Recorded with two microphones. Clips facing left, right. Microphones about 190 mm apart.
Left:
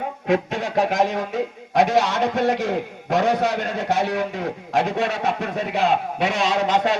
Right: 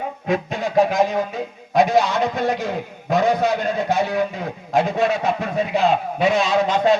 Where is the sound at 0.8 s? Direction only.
75° left (ahead or behind).